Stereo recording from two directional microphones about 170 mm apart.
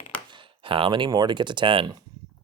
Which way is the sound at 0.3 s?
30° right (ahead or behind).